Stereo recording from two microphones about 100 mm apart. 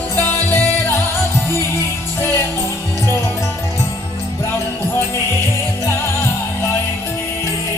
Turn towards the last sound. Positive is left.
turn(degrees=25)  # may be behind; listen again after turning